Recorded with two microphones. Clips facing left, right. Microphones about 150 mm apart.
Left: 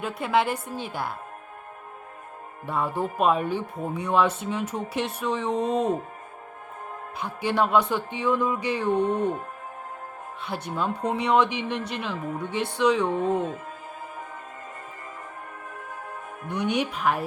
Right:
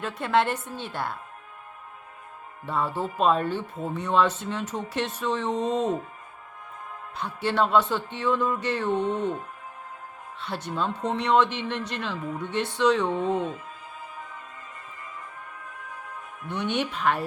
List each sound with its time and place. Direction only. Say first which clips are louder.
0.0 s speech: even; 5° left (ahead or behind)
2.6 s speech: left 1 dB; 10° left (ahead or behind)
7.2 s speech: even; 10° left (ahead or behind)
10.4 s speech: even; 10° left (ahead or behind)
13.1 s speech: left 1 dB; 45° left (ahead or behind)
16.5 s speech: left 2 dB; 5° left (ahead or behind)